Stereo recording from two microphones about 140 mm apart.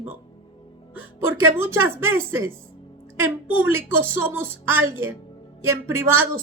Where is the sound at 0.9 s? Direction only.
15° right (ahead or behind).